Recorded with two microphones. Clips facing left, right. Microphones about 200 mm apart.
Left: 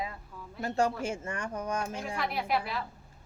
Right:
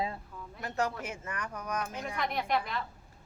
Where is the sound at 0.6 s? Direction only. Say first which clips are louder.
Left 5 dB; 30° left (ahead or behind).